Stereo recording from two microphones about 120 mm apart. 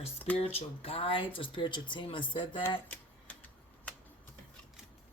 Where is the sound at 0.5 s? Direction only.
55° left (ahead or behind).